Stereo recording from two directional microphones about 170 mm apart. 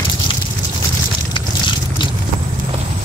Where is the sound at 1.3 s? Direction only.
30° left (ahead or behind).